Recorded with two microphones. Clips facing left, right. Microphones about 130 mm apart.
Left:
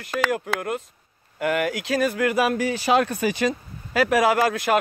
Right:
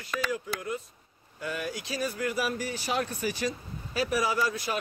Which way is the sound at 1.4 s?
80° left.